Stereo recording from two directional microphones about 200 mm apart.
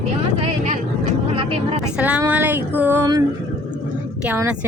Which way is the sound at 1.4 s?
25° right (ahead or behind).